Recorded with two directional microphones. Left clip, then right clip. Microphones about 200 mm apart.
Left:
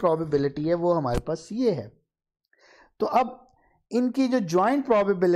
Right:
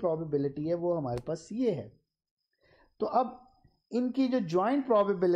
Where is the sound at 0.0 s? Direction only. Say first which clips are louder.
Left 7 dB; 25° left (ahead or behind).